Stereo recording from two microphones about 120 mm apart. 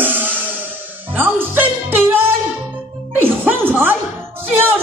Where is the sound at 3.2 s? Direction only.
15° right (ahead or behind).